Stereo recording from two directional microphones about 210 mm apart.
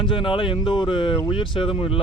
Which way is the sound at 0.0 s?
25° left (ahead or behind).